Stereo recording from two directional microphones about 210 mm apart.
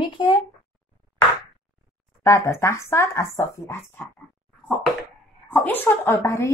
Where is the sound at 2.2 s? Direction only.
15° left (ahead or behind).